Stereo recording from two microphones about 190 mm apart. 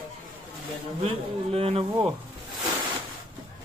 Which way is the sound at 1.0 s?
30° right (ahead or behind).